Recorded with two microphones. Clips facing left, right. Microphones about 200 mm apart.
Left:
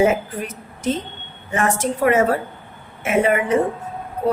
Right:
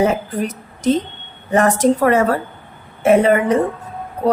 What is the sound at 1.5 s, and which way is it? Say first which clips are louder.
Speech: right 7 dB; 40° right (ahead or behind).